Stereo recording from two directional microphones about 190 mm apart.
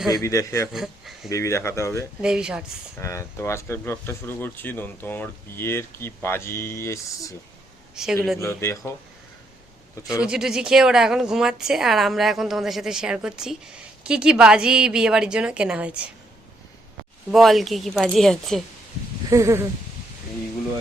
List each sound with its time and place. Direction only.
0.1 s speech: 15° left (ahead or behind)
0.7 s a woman's voice: centre (ahead or behind)
1.3 s speech: 15° left (ahead or behind)
2.2 s a woman's voice: 5° right (ahead or behind)
3.0 s speech: 15° left (ahead or behind)
8.0 s a woman's voice: 5° right (ahead or behind)
8.4 s speech: 15° left (ahead or behind)
10.1 s a woman's voice: 5° right (ahead or behind)
17.3 s a woman's voice: centre (ahead or behind)
19.3 s speech: 15° right (ahead or behind)